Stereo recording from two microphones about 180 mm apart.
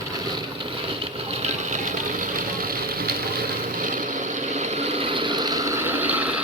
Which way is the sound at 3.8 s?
45° right (ahead or behind).